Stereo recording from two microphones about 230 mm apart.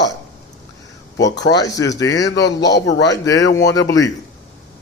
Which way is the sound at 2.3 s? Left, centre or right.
Left.